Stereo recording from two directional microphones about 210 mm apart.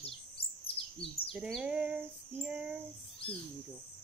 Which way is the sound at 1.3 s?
Centre (ahead or behind).